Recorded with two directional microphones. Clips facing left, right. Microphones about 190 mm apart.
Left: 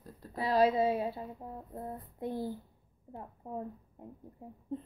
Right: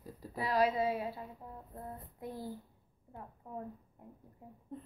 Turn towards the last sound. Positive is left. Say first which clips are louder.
# left 6 dB
turn(degrees=25)  # may be behind; listen again after turning